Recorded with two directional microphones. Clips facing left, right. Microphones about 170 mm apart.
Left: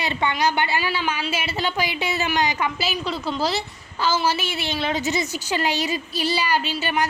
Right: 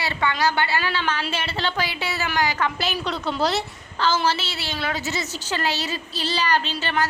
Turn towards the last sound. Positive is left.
turn(degrees=10)  # may be behind; listen again after turning